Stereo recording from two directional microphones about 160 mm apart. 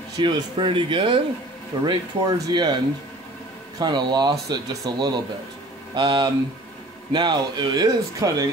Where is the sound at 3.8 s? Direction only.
25° right (ahead or behind).